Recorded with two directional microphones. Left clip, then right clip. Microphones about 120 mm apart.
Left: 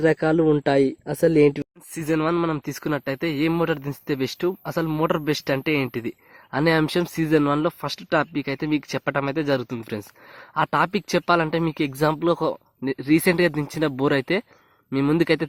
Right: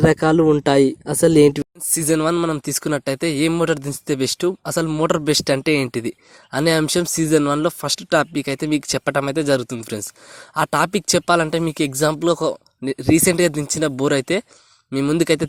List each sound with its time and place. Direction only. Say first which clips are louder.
0.0 s speech: right 4 dB; 45° right (ahead or behind)
2.3 s speech: right 3 dB; 30° right (ahead or behind)
2.6 s speech: right 4 dB; 40° right (ahead or behind)